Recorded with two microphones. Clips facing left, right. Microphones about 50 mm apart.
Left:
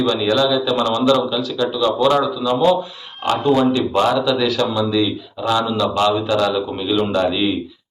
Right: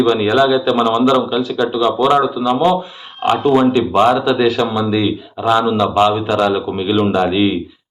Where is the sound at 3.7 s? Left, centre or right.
Right.